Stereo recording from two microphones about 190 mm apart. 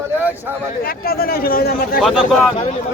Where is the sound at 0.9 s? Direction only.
50° left (ahead or behind).